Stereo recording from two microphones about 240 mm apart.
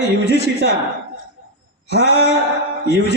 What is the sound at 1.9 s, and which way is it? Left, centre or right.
A man's voice, left.